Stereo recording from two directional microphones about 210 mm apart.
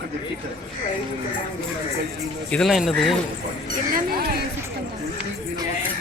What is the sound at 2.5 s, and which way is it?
Speech, centre (ahead or behind).